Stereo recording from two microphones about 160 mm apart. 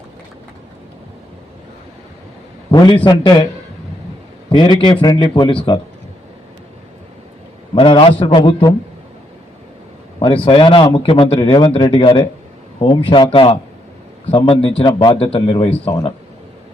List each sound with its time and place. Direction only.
2.6 s speech: 30° left (ahead or behind)
4.4 s speech: 30° left (ahead or behind)
7.8 s speech: 35° left (ahead or behind)
10.2 s speech: 30° left (ahead or behind)